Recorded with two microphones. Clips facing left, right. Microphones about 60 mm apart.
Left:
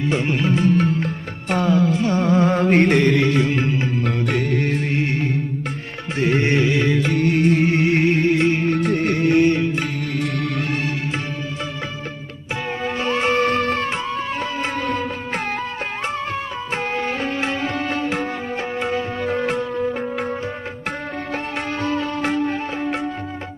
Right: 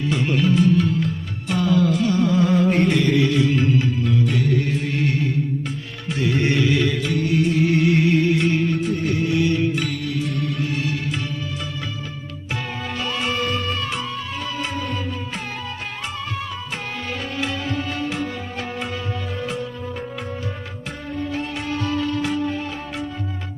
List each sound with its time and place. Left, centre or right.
0.1 s music: left
4.0 s music: left
4.9 s music: left
8.6 s music: left
10.2 s music: left
12.8 s music: left
13.4 s music: left
13.8 s music: left
14.7 s music: left
16.0 s music: left
19.2 s music: left
21.8 s music: left